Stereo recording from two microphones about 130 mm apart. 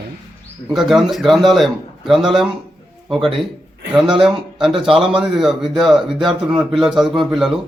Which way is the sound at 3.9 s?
5° right (ahead or behind).